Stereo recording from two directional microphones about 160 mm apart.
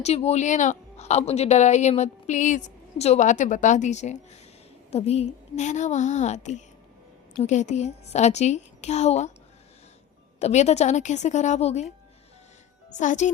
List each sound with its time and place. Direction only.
0.0 s a woman's voice: 40° left (ahead or behind)
10.4 s a woman's voice: 45° left (ahead or behind)
12.9 s a woman's voice: 50° left (ahead or behind)